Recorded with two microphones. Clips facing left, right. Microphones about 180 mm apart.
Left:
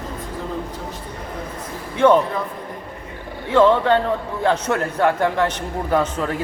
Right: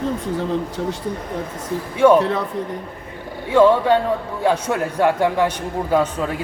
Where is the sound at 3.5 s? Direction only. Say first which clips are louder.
Right 1 dB; 10° right (ahead or behind).